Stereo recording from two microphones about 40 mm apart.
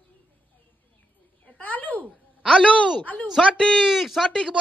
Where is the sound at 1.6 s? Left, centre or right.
Left.